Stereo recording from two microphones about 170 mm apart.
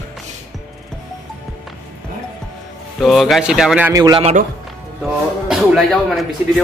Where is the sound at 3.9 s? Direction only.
20° right (ahead or behind).